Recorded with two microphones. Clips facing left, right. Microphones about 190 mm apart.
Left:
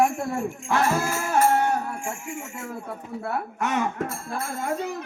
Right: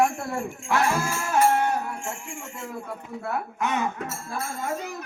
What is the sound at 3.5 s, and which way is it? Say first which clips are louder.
Speech: left 2 dB; 55° left (ahead or behind).